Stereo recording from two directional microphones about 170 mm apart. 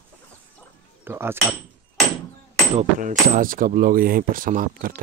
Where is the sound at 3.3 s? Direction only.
55° right (ahead or behind).